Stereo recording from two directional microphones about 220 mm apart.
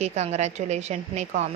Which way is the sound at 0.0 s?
30° right (ahead or behind).